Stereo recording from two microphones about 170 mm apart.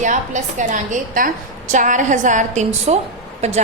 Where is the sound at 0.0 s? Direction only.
45° right (ahead or behind).